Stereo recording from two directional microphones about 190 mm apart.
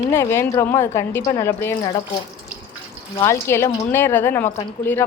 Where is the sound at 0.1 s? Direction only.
15° left (ahead or behind).